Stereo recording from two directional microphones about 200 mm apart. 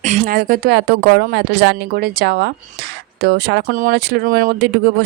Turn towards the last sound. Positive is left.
turn(degrees=-50)  # may be behind; listen again after turning